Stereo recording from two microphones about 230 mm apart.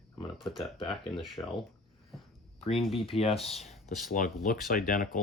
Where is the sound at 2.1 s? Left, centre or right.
Centre.